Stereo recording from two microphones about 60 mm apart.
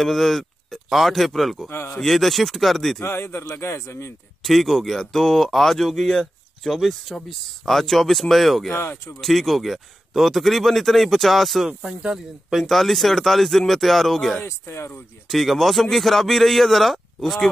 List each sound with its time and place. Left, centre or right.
0.0 s speech: centre
1.7 s speech: left
2.0 s a man's voice: centre
3.1 s speech: left
3.5 s speech: left
4.5 s a man's voice: centre
8.7 s speech: left
9.2 s a man's voice: centre
12.5 s a man's voice: centre
14.4 s speech: left
15.2 s a man's voice: centre